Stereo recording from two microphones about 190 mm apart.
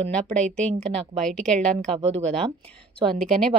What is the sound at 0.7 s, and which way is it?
Speech, 35° right (ahead or behind).